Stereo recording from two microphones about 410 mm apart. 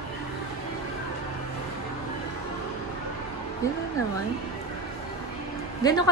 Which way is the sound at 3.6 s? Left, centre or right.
Centre.